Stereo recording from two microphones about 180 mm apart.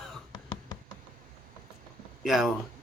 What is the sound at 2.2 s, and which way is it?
Speech, centre (ahead or behind).